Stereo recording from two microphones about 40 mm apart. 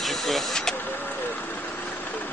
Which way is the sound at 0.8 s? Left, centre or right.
Left.